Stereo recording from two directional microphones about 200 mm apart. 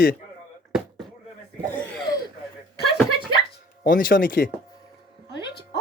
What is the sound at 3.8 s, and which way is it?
Speech, 45° left (ahead or behind).